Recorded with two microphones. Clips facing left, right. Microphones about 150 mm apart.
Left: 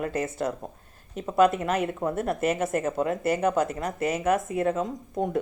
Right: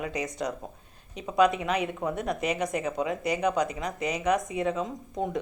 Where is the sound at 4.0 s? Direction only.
50° left (ahead or behind).